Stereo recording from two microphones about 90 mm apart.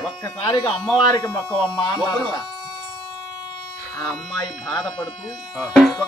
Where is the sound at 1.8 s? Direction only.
50° left (ahead or behind).